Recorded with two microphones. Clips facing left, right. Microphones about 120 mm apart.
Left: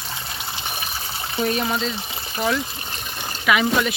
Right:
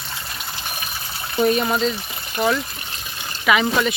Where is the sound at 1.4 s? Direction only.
5° right (ahead or behind).